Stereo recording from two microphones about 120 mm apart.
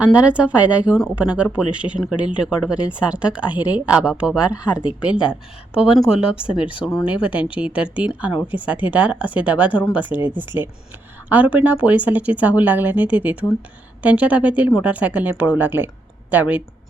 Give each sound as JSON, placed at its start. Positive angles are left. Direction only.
{"t": 0.0, "sound": "speech", "side_deg": -10}